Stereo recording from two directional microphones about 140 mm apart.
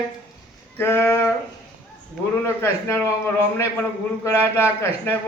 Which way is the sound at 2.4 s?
15° left (ahead or behind).